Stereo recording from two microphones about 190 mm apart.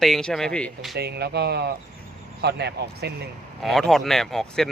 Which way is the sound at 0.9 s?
60° right (ahead or behind).